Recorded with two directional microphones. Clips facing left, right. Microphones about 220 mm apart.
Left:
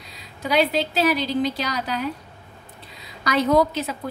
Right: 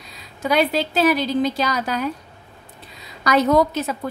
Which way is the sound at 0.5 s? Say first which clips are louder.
Right 1 dB; 50° right (ahead or behind).